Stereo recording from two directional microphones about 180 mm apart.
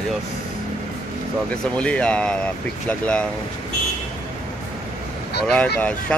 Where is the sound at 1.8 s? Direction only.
5° left (ahead or behind).